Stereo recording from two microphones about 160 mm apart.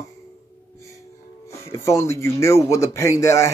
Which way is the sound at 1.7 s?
15° left (ahead or behind).